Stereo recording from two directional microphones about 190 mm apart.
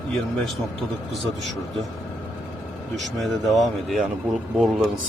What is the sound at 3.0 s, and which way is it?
Speech, centre (ahead or behind).